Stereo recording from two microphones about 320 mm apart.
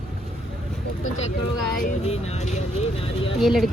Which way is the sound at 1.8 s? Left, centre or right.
Left.